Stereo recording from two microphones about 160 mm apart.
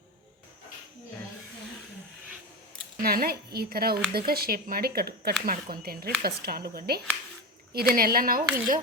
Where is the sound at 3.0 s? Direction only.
70° right (ahead or behind).